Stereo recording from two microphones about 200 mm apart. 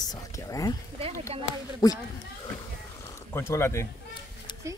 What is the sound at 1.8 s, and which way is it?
Speech, 20° left (ahead or behind).